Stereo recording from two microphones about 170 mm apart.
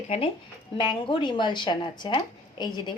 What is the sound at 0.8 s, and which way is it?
Speech, 30° left (ahead or behind).